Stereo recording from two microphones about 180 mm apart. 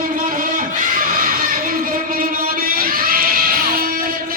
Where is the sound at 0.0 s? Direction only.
50° right (ahead or behind).